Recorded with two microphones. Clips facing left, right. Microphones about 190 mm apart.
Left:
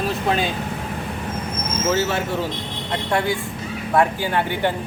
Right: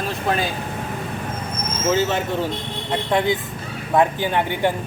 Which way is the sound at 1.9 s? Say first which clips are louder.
Right 3 dB; 15° right (ahead or behind).